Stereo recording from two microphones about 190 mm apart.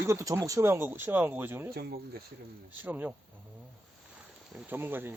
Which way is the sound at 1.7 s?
55° right (ahead or behind).